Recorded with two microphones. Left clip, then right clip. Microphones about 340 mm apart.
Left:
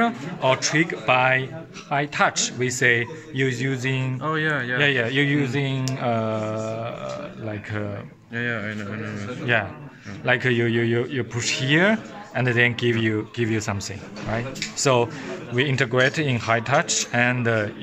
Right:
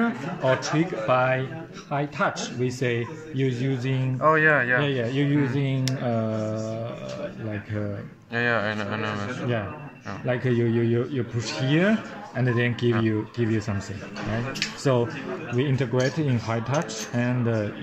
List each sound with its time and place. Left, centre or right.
0.0 s a man's voice: left
4.2 s speech: centre
4.7 s a man's voice: left
10.2 s a man's voice: left
14.8 s a man's voice: left